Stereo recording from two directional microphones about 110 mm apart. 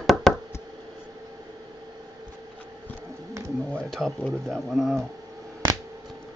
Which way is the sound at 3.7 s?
5° left (ahead or behind).